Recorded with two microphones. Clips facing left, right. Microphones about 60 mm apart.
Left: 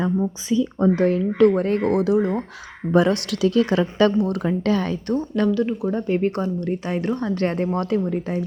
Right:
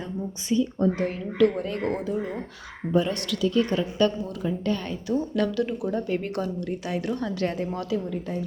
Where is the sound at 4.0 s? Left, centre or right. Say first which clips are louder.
Left 6 dB; left.